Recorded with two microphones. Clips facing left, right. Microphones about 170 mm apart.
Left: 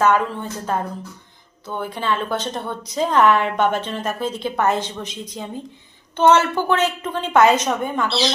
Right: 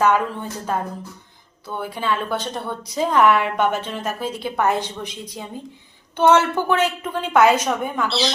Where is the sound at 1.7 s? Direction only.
10° right (ahead or behind).